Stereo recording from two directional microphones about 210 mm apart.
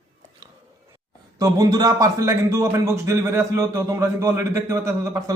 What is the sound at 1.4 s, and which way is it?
A man's voice, 15° right (ahead or behind).